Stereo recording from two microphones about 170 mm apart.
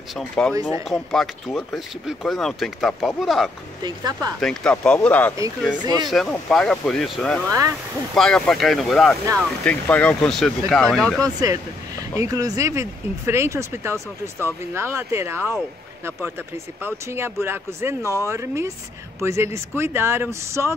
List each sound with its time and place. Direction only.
0.1 s speech: 5° left (ahead or behind)
0.6 s speech: 20° right (ahead or behind)
0.8 s speech: centre (ahead or behind)
3.8 s speech: 25° right (ahead or behind)
4.4 s speech: 5° left (ahead or behind)
11.1 s speech: 20° right (ahead or behind)
16.8 s speech: 15° right (ahead or behind)